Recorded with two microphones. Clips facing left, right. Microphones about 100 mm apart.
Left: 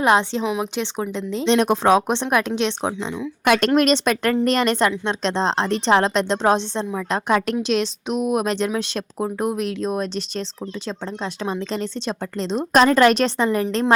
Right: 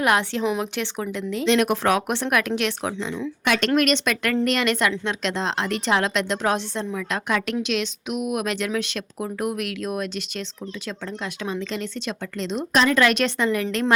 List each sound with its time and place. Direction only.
0.0 s speech: 25° left (ahead or behind)
3.4 s a woman's voice: 45° left (ahead or behind)